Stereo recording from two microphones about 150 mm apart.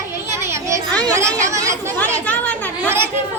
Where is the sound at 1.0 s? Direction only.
20° right (ahead or behind).